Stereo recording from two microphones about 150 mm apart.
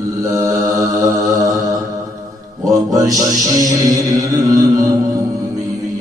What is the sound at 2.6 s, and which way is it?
Music, 25° right (ahead or behind).